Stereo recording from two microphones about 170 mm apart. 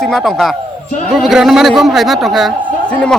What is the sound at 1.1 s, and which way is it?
A man's voice, centre (ahead or behind).